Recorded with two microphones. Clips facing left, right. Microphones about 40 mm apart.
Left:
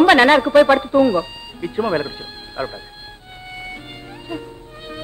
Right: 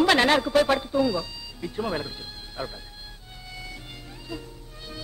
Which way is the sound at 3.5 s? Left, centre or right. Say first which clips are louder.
Left 8 dB; left.